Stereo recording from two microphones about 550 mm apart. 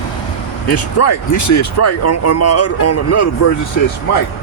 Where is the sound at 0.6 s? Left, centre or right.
Left.